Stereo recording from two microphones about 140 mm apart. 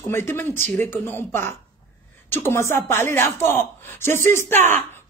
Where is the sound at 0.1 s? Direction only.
15° left (ahead or behind).